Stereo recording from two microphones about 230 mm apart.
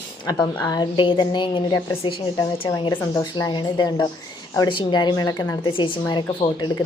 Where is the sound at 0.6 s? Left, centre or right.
Centre.